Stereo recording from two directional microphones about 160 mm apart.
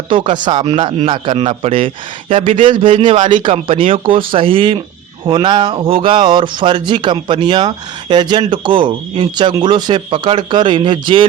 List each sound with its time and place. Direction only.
0.1 s a man's voice: 30° right (ahead or behind)